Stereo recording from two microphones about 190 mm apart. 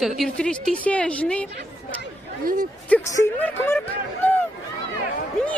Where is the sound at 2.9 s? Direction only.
10° left (ahead or behind).